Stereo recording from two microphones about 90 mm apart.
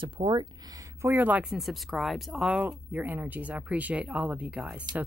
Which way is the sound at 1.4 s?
Centre (ahead or behind).